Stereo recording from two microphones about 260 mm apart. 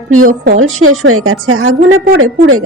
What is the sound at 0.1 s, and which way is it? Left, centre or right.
A woman's voice, right.